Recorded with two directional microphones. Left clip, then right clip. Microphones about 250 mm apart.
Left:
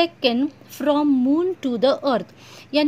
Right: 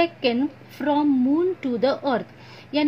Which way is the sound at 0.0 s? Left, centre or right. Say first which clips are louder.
Left 2 dB; left.